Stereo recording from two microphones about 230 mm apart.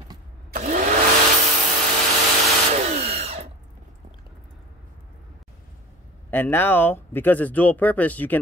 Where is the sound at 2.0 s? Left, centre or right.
Right.